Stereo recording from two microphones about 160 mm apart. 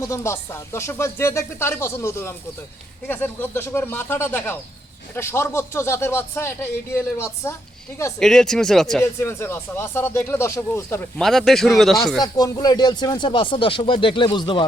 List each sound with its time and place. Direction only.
0.0 s speech: 15° left (ahead or behind)
8.2 s speech: 5° left (ahead or behind)
9.1 s speech: 15° left (ahead or behind)
11.2 s speech: centre (ahead or behind)
12.2 s speech: 25° left (ahead or behind)